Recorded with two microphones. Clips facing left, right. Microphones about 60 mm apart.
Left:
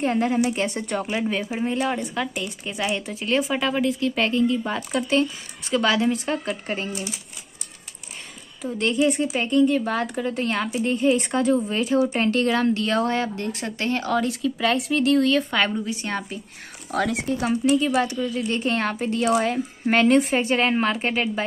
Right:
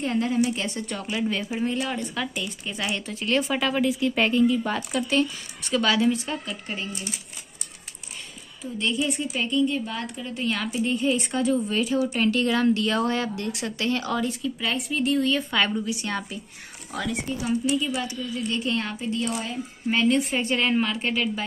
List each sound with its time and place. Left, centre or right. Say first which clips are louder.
0.0 s a woman's voice: left 2 dB; left
1.3 s a woman's voice: left 2 dB; centre
2.4 s a woman's voice: left 3 dB; centre
6.5 s speech: left 5 dB; left
8.6 s speech: left 5 dB; left
9.8 s speech: left 7 dB; left
10.8 s speech: left 1 dB; left
11.6 s speech: left 3 dB; left
14.1 s speech: left 4 dB; left
15.5 s speech: left 1 dB; left
16.9 s speech: left 5 dB; left
17.4 s speech: left 5 dB; left
20.2 s speech: left 4 dB; left